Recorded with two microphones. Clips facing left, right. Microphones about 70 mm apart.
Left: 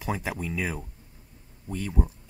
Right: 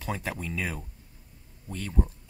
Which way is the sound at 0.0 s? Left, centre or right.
Centre.